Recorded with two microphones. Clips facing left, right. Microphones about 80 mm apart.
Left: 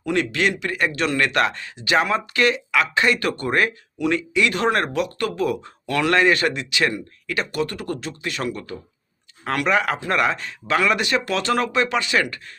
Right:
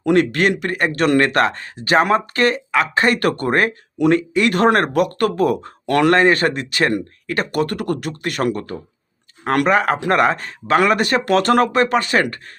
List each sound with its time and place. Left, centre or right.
0.0 s speech: right